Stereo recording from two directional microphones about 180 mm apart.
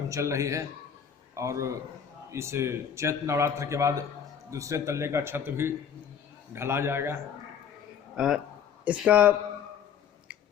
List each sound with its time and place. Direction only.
0.1 s a man's voice: 15° right (ahead or behind)
8.1 s a man's voice: 5° right (ahead or behind)